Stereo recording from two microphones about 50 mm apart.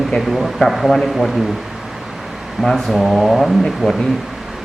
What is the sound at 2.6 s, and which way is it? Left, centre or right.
A man's voice, centre.